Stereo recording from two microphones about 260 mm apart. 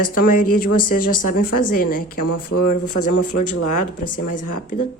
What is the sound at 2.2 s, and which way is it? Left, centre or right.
Speech, left.